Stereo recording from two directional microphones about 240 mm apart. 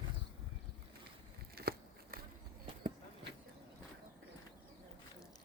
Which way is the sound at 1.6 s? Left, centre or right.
Right.